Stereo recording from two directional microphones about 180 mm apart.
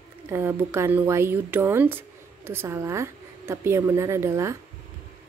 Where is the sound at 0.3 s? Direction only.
15° right (ahead or behind).